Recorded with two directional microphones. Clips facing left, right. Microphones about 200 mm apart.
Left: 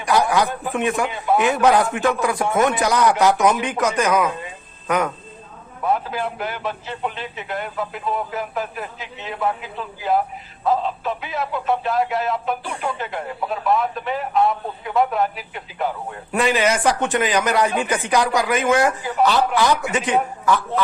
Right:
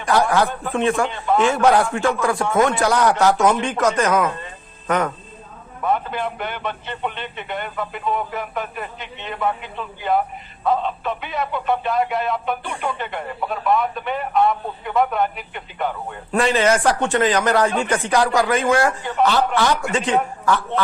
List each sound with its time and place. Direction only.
0.0 s a man's voice: 15° left (ahead or behind)
16.4 s a man's voice: 15° left (ahead or behind)
19.0 s speech: 5° left (ahead or behind)